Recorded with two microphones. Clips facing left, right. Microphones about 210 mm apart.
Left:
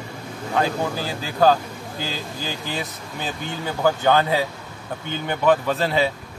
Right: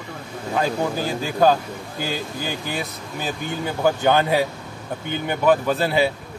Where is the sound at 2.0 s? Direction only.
55° right (ahead or behind).